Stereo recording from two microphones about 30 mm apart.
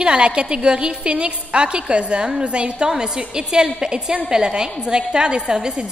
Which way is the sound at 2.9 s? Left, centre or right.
Right.